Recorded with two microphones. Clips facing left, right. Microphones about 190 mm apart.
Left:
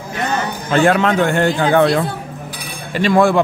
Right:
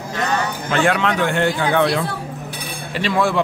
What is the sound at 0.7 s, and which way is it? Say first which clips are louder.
A man's voice: left 5 dB; 40° left (ahead or behind).